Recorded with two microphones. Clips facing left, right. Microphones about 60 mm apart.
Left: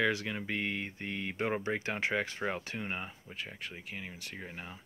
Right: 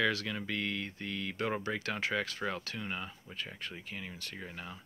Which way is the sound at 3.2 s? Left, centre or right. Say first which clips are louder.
Even; centre.